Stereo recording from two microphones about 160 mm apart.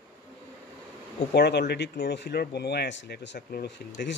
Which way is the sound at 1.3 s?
90° left.